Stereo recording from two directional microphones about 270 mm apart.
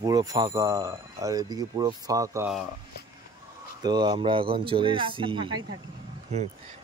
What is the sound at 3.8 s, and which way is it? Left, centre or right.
Speech, centre.